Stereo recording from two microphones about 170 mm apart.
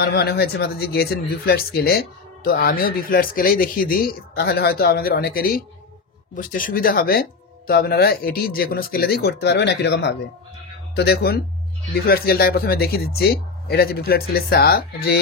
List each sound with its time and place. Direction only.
0.0 s speech: 70° left (ahead or behind); by 10.1 s 85° left
11.0 s speech: 70° left (ahead or behind)